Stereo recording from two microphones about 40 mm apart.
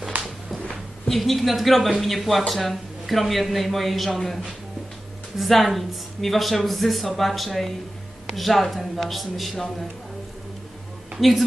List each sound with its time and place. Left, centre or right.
0.1 s a sound: right
1.1 s a man's voice: centre
5.4 s a man's voice: centre
11.2 s a man's voice: centre